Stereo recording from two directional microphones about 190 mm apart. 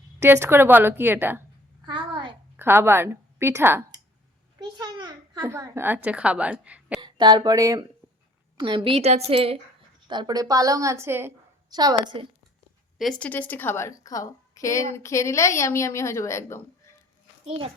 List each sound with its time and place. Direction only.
0.2 s a woman's voice: 10° right (ahead or behind)
2.6 s a woman's voice: 10° right (ahead or behind)
4.8 s a child's voice: 20° right (ahead or behind); by 7.0 s 5° right (ahead or behind)
7.0 s a woman's voice: 25° right (ahead or behind)
13.0 s a woman's voice: 5° left (ahead or behind)
17.4 s a child's voice: 30° right (ahead or behind)